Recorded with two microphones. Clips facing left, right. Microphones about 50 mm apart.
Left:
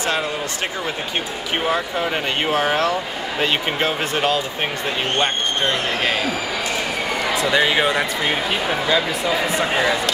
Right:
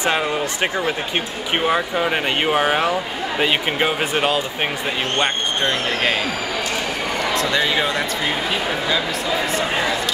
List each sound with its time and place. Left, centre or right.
1.7 s speech: centre
7.3 s a man's voice: centre
7.6 s speech: left
8.8 s speech: centre